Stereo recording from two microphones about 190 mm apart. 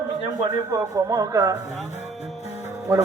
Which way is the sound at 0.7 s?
20° right (ahead or behind).